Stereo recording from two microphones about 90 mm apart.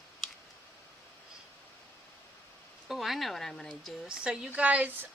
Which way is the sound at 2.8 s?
Centre (ahead or behind).